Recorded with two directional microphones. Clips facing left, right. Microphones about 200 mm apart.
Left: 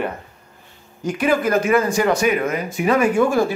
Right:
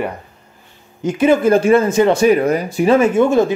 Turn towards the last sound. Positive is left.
turn(degrees=-20)  # may be behind; listen again after turning